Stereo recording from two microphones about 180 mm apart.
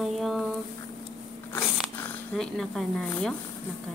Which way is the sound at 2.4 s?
Centre (ahead or behind).